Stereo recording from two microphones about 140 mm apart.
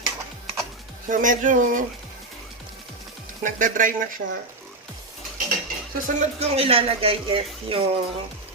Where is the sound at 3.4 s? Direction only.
70° right (ahead or behind).